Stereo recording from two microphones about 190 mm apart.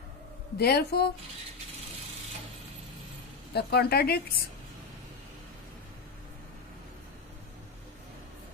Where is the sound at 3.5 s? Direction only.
60° left (ahead or behind).